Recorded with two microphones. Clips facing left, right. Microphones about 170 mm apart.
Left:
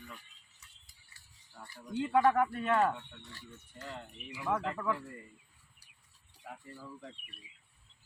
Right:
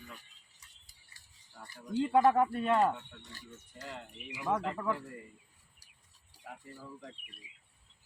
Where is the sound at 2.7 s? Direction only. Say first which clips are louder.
Right 1 dB; 15° right (ahead or behind).